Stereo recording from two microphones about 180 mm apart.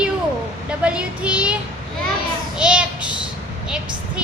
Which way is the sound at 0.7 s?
5° right (ahead or behind).